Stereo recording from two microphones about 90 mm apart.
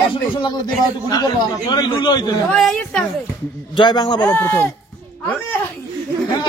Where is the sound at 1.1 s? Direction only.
50° left (ahead or behind).